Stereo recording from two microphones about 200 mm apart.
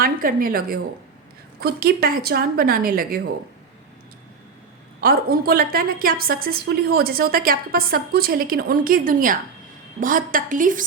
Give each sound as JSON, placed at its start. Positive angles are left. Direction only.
{"t": 0.0, "sound": "a woman's voice", "side_deg": -45}
{"t": 4.9, "sound": "a woman's voice", "side_deg": -50}